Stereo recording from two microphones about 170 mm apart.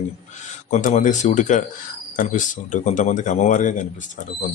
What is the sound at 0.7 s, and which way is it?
Speech, 50° left (ahead or behind).